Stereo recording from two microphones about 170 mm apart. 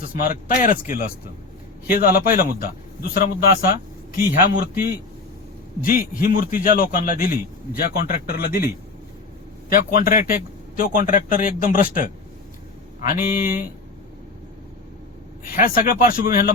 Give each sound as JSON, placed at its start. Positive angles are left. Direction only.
{"t": 0.0, "sound": "a man's voice", "side_deg": 55}
{"t": 15.5, "sound": "a man's voice", "side_deg": 55}